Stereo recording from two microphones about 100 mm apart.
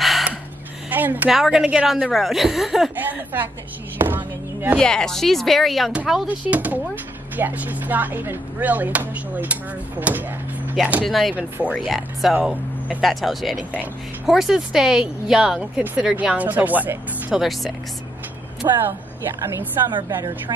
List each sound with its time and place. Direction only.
0.0 s a sound: centre (ahead or behind)
0.8 s a sound: 15° right (ahead or behind)
1.3 s speech: 5° right (ahead or behind)
3.0 s chopping: 20° right (ahead or behind)
4.0 s a sound: 20° right (ahead or behind)
4.7 s speech: 5° left (ahead or behind)
6.2 s chopping: 15° right (ahead or behind)
11.1 s speech: centre (ahead or behind)
16.0 s chopping: 5° right (ahead or behind)
17.3 s speech: centre (ahead or behind)
18.6 s speech: 40° right (ahead or behind)
20.2 s speech: 50° right (ahead or behind)